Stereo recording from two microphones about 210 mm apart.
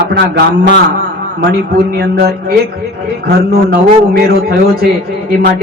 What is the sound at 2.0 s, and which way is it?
Speech, 50° right (ahead or behind).